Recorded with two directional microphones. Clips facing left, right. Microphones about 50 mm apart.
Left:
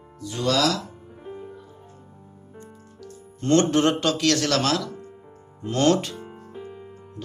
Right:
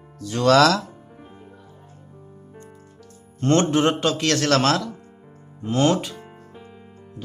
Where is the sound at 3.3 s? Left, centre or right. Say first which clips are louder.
Even; right.